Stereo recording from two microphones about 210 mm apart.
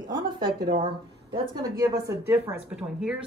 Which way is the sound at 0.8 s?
20° right (ahead or behind).